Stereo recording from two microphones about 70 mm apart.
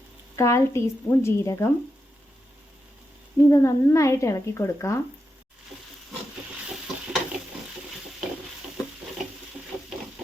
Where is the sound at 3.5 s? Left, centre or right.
Left.